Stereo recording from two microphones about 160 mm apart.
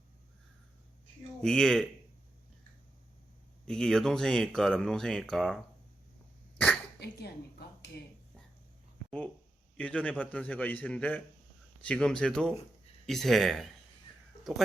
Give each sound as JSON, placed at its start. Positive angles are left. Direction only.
{"t": 1.4, "sound": "speech", "side_deg": 5}
{"t": 3.7, "sound": "speech", "side_deg": 5}
{"t": 7.0, "sound": "speech", "side_deg": 90}
{"t": 9.0, "sound": "a man's voice", "side_deg": 5}